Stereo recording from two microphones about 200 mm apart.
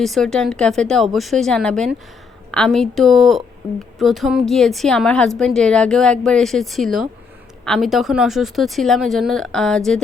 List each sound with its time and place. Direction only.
0.0 s speech: centre (ahead or behind)